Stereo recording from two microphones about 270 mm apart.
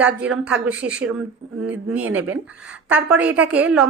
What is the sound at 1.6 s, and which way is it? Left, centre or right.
Speech, right.